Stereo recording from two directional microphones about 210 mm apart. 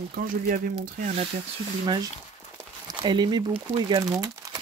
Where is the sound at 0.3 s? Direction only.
40° right (ahead or behind).